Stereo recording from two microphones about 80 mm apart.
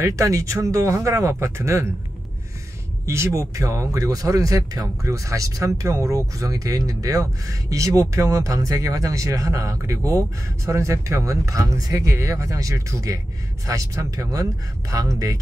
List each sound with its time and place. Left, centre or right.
0.0 s speech: right
3.1 s speech: right